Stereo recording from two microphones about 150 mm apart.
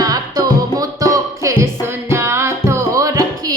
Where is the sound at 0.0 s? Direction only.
25° right (ahead or behind).